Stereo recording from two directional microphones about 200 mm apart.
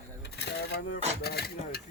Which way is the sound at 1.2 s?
50° left (ahead or behind).